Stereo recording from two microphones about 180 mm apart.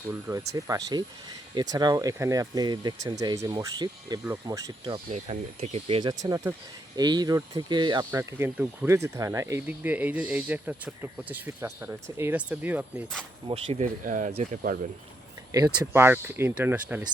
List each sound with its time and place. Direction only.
0.1 s speech: 15° right (ahead or behind)
5.1 s speech: 35° right (ahead or behind)
6.0 s speech: 20° right (ahead or behind)
8.2 s speech: 15° right (ahead or behind)
13.5 s speech: 40° right (ahead or behind)
15.5 s speech: 20° right (ahead or behind)